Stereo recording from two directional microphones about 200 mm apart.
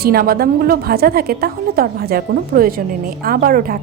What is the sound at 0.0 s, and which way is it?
A woman's voice, 50° right (ahead or behind).